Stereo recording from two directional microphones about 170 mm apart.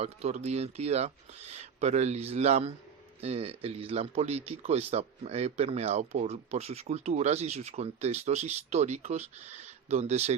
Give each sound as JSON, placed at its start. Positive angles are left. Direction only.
{"t": 0.0, "sound": "a man's voice", "side_deg": -40}